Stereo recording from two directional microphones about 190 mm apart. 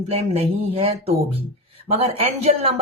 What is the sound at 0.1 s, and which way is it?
A woman's voice, 30° right (ahead or behind).